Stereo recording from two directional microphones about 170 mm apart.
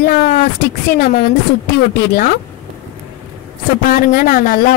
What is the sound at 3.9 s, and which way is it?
Speech, 55° left (ahead or behind).